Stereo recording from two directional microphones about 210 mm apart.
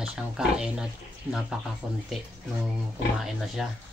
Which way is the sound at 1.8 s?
Centre (ahead or behind).